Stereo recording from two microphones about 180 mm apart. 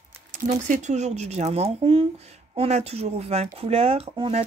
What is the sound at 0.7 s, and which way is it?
Speech, 40° right (ahead or behind).